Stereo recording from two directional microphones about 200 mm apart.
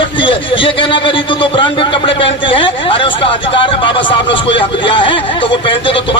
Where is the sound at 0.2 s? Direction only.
25° left (ahead or behind).